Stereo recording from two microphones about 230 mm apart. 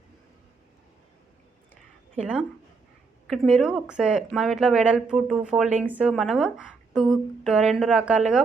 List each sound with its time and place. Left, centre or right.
3.2 s speech: centre